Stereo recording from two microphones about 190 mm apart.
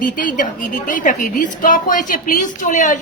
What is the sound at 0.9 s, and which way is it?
A woman's voice, 45° left (ahead or behind).